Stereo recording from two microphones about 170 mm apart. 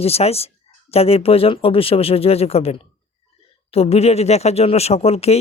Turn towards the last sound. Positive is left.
turn(degrees=35)  # may be behind; listen again after turning